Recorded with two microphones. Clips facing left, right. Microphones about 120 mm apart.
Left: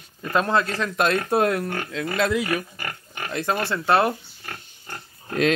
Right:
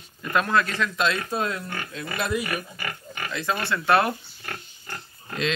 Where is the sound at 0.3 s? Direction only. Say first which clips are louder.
Left 1 dB; 30° left (ahead or behind).